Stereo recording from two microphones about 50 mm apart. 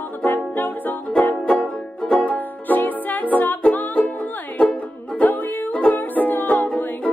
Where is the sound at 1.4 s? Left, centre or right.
Left.